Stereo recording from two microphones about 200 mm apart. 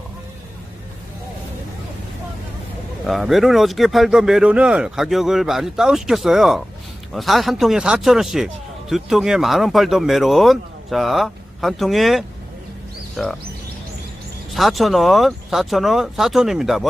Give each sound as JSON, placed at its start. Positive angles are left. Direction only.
{"t": 3.1, "sound": "speech", "side_deg": 0}
{"t": 14.5, "sound": "speech", "side_deg": 0}